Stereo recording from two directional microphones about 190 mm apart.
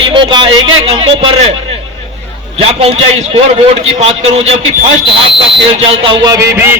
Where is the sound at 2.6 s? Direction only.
30° right (ahead or behind).